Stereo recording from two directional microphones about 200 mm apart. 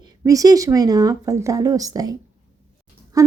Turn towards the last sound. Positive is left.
turn(degrees=-15)  # may be behind; listen again after turning